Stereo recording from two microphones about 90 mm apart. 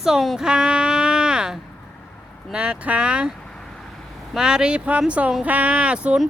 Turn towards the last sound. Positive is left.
turn(degrees=-10)  # may be behind; listen again after turning